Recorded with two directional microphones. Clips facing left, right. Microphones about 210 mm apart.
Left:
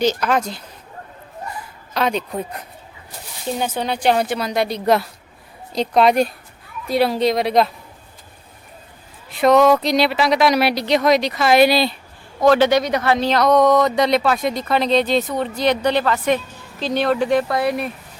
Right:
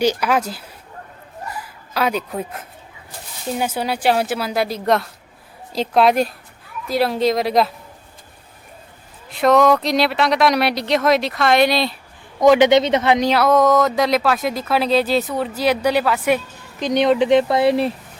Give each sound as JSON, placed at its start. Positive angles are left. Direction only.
{"t": 0.0, "sound": "speech", "side_deg": -10}
{"t": 1.9, "sound": "speech", "side_deg": -5}
{"t": 9.3, "sound": "speech", "side_deg": 0}
{"t": 12.4, "sound": "speech", "side_deg": -20}